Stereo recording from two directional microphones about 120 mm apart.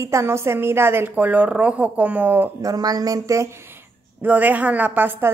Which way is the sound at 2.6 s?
30° right (ahead or behind).